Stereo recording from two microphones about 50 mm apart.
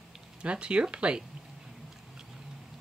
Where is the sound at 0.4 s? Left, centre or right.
Right.